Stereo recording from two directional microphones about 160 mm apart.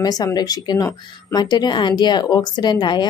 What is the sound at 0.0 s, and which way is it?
A woman's voice, 25° left (ahead or behind).